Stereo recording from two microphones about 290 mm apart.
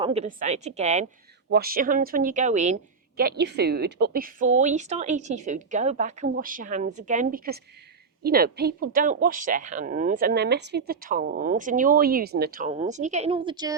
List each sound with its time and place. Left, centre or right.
0.0 s a woman's voice: right